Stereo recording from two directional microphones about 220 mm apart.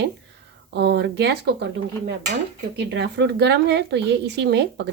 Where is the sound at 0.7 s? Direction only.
50° right (ahead or behind).